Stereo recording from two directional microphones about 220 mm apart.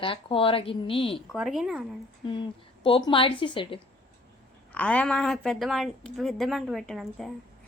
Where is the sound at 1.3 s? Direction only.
Centre (ahead or behind).